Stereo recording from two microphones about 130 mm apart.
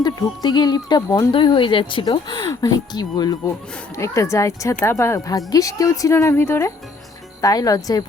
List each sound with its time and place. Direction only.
0.0 s speech: 35° left (ahead or behind)